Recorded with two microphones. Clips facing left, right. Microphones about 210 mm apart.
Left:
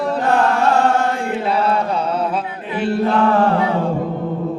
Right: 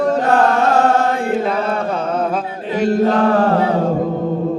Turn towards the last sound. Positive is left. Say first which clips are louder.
# right 2 dB
turn(degrees=-40)  # may be behind; listen again after turning